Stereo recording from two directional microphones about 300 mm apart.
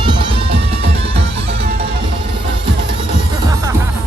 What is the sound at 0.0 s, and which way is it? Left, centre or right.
Music, centre.